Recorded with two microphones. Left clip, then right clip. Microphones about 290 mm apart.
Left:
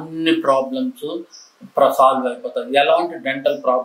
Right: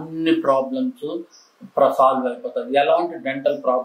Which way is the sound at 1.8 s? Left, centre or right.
Centre.